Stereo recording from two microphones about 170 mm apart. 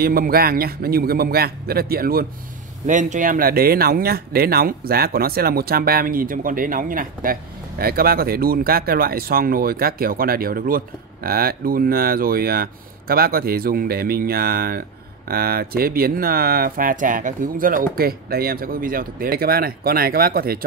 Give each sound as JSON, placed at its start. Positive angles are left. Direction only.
{"t": 0.0, "sound": "speech", "side_deg": -60}
{"t": 2.9, "sound": "speech", "side_deg": -50}